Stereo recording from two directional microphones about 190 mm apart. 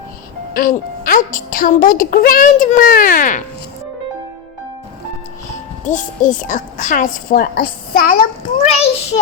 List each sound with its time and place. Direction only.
0.5 s a child's voice: 50° left (ahead or behind)
5.8 s a child's voice: 40° left (ahead or behind)
8.6 s a child's voice: 35° left (ahead or behind)